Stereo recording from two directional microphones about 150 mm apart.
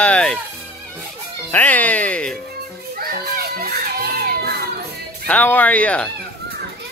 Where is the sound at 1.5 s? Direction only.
10° left (ahead or behind).